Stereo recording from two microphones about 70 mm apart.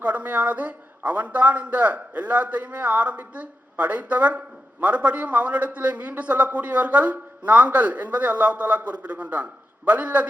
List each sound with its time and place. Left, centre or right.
0.0 s a man's voice: right